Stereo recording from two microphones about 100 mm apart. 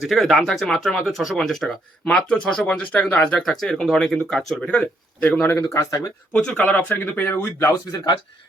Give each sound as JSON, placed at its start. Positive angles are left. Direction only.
{"t": 0.0, "sound": "speech", "side_deg": 0}
{"t": 5.7, "sound": "speech", "side_deg": 35}
{"t": 6.3, "sound": "speech", "side_deg": 10}
{"t": 6.7, "sound": "speech", "side_deg": 20}
{"t": 7.7, "sound": "speech", "side_deg": 45}